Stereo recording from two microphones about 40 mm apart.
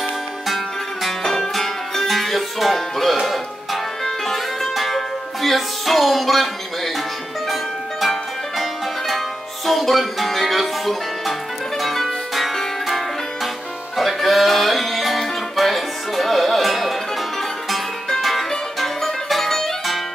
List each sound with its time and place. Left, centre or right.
1.0 s music: centre
8.0 s music: centre